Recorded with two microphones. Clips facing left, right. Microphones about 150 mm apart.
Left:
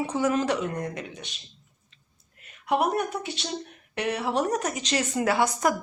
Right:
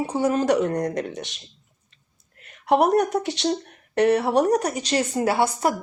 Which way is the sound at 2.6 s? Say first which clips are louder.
Right 6 dB; 50° right (ahead or behind).